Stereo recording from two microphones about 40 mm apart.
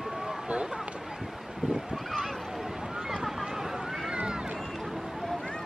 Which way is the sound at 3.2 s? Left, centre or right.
Centre.